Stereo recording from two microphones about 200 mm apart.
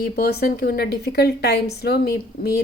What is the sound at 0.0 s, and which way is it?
A woman's voice, 50° left (ahead or behind).